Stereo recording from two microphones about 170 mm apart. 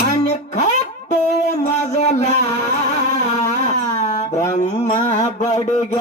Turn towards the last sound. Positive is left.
turn(degrees=45)  # may be behind; listen again after turning